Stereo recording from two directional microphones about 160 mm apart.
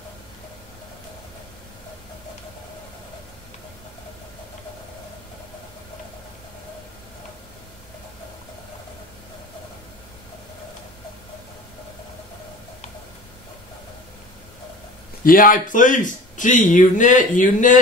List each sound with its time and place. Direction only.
15.2 s a man's voice: 60° left (ahead or behind)